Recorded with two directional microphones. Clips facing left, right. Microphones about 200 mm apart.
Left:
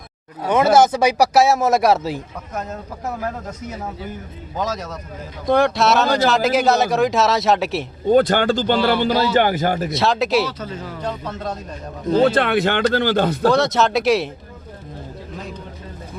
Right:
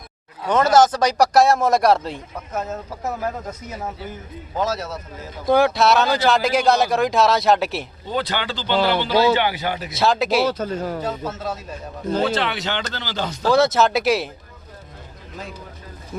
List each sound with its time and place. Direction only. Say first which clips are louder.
0.4 s speech: left 1 dB; 10° left (ahead or behind)
4.5 s speech: right 1 dB; 5° right (ahead or behind)
8.0 s a man's voice: left 11 dB; 50° left (ahead or behind)
9.9 s speech: right 3 dB; centre (ahead or behind)
10.4 s speech: right 5 dB; 45° right (ahead or behind)
11.0 s speech: even; 5° right (ahead or behind)
12.2 s a man's voice: left 8 dB; 55° left (ahead or behind)
13.5 s speech: right 6 dB; centre (ahead or behind)